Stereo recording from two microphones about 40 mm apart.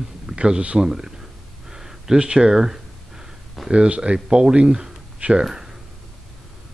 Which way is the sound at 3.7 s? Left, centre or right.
Right.